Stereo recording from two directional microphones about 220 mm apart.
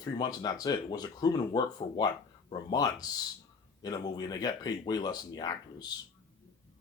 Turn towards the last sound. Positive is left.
turn(degrees=20)  # may be behind; listen again after turning